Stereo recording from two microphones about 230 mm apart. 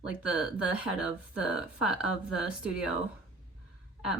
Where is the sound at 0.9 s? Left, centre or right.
Left.